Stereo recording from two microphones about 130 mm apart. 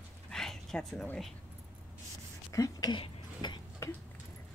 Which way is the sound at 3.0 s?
35° left (ahead or behind).